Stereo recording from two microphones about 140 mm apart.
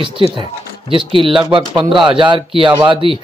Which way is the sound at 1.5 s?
35° right (ahead or behind).